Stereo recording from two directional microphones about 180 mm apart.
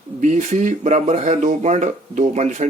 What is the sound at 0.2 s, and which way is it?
Speech, 45° right (ahead or behind).